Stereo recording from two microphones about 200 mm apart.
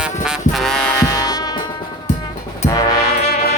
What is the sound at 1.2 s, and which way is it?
Music, 20° left (ahead or behind).